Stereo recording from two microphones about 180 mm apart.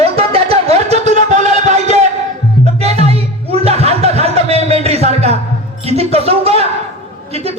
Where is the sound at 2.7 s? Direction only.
35° right (ahead or behind).